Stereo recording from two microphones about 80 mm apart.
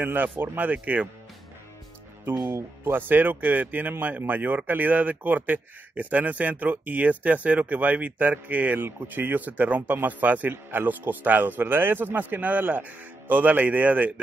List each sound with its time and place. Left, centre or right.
0.0 s speech: right
2.3 s speech: right
2.8 s speech: right